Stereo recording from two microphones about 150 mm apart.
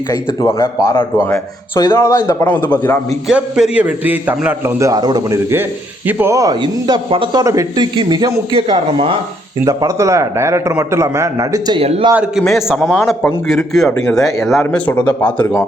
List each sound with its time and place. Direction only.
0.1 s a man's voice: 25° left (ahead or behind)
3.2 s a man's voice: 5° right (ahead or behind); by 8.7 s 25° right (ahead or behind)
8.9 s speech: 35° right (ahead or behind)
9.6 s a man's voice: 25° right (ahead or behind)
11.8 s speech: 40° right (ahead or behind)
12.4 s a man's voice: centre (ahead or behind)